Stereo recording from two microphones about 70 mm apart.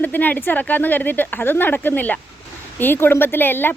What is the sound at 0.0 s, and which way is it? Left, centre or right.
Speech, left.